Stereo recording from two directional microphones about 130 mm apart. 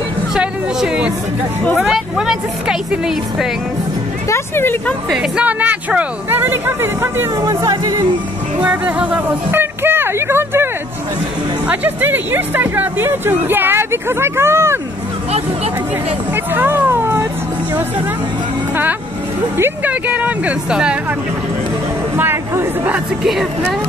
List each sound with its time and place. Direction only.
0.3 s speech: 5° right (ahead or behind)
4.3 s speech: 15° left (ahead or behind)
5.1 s speech: 10° right (ahead or behind); by 8.1 s 30° right (ahead or behind)
8.5 s speech: 10° right (ahead or behind)
16.5 s speech: 15° right (ahead or behind)
19.5 s speech: 15° right (ahead or behind)
22.1 s speech: 15° right (ahead or behind)